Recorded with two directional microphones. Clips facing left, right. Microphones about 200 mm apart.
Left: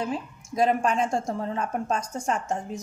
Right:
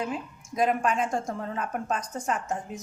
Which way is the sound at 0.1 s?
30° left (ahead or behind).